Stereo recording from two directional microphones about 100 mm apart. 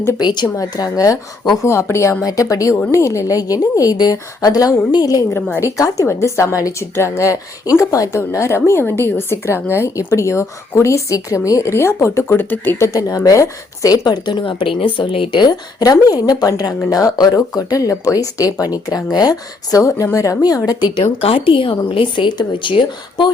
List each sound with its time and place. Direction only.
0.2 s a woman's voice: 45° left (ahead or behind)
5.5 s a woman's voice: 30° left (ahead or behind)
12.9 s a woman's voice: 35° left (ahead or behind)
20.9 s a woman's voice: 65° left (ahead or behind)